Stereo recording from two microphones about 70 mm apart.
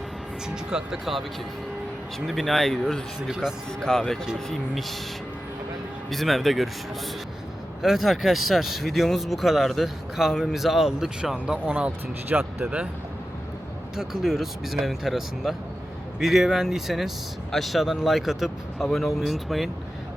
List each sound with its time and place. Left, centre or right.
0.4 s speech: centre
3.2 s speech: centre
3.8 s speech: centre
6.1 s speech: centre
7.8 s speech: centre
11.6 s speech: right
12.3 s speech: right
12.6 s speech: centre
13.9 s speech: centre